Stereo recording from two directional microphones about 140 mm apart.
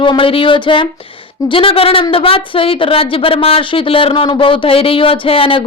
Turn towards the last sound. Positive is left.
turn(degrees=40)  # may be behind; listen again after turning